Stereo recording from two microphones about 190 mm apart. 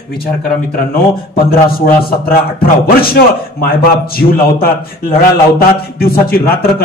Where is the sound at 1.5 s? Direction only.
50° left (ahead or behind).